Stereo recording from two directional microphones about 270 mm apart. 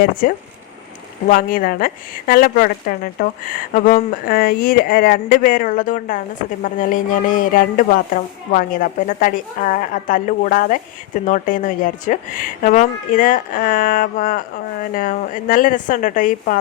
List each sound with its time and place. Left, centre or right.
0.2 s a woman's voice: left